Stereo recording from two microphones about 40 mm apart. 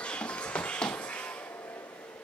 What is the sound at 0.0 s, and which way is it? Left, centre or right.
Music, left.